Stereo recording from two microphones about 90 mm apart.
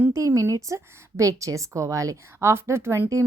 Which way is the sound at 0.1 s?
35° right (ahead or behind).